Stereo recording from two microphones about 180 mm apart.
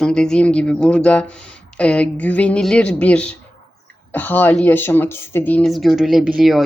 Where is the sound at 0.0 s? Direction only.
5° left (ahead or behind).